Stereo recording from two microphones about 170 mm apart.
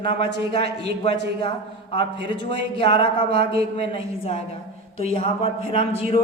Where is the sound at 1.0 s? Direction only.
25° left (ahead or behind).